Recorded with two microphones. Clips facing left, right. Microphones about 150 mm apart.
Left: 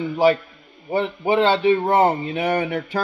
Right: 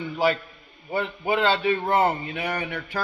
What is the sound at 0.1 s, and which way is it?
A man's voice, 20° left (ahead or behind).